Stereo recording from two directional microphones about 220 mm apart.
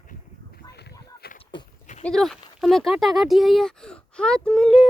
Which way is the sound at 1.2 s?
45° left (ahead or behind).